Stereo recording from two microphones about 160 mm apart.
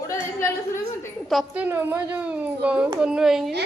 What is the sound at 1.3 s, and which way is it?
A child's voice, 10° right (ahead or behind).